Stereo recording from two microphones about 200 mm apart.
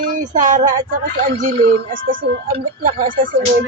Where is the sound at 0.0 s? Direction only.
40° right (ahead or behind).